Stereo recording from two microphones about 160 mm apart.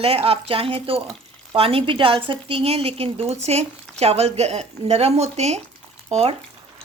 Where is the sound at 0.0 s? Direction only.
40° right (ahead or behind).